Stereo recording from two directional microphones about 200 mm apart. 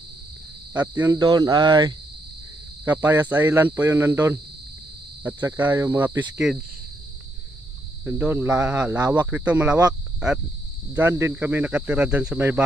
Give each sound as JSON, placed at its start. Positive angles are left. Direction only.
{"t": 0.7, "sound": "speech", "side_deg": -10}
{"t": 2.8, "sound": "speech", "side_deg": -10}
{"t": 8.0, "sound": "speech", "side_deg": -10}
{"t": 10.9, "sound": "speech", "side_deg": -10}